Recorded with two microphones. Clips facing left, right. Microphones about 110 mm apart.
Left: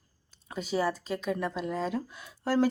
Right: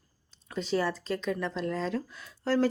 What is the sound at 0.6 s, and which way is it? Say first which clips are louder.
A woman's voice: even; 10° left (ahead or behind).